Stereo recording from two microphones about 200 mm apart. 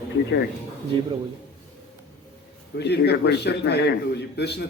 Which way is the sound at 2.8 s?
55° left (ahead or behind).